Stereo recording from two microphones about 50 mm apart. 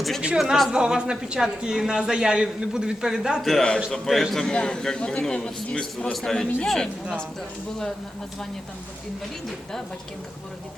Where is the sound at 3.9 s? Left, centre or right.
Centre.